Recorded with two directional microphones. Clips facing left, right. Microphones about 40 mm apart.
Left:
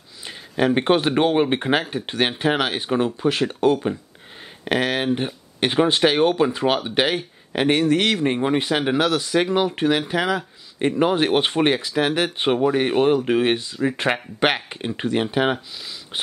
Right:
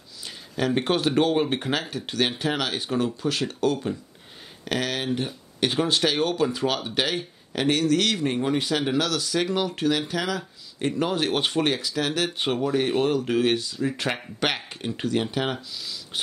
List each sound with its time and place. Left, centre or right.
0.2 s speech: left